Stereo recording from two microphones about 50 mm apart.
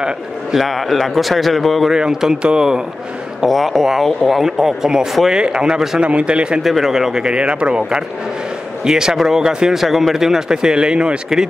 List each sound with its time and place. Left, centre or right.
0.6 s a man's voice: centre
1.9 s speech: centre
3.4 s a man's voice: centre; by 6.6 s right
6.6 s speech: centre